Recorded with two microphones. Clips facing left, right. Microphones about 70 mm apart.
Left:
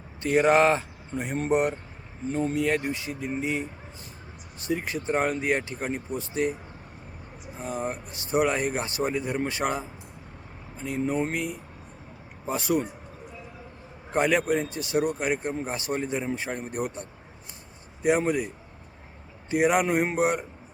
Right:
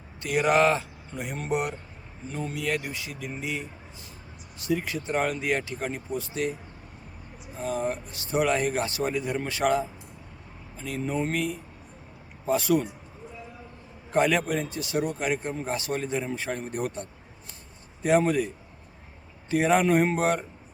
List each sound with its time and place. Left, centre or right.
0.2 s speech: left
7.6 s speech: left
14.1 s a man's voice: left